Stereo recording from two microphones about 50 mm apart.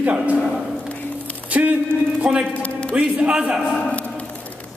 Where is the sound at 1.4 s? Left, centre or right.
Right.